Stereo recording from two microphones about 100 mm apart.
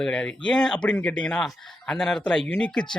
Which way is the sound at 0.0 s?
10° left (ahead or behind).